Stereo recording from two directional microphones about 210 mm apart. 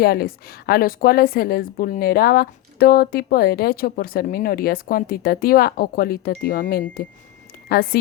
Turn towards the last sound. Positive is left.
turn(degrees=45)  # may be behind; listen again after turning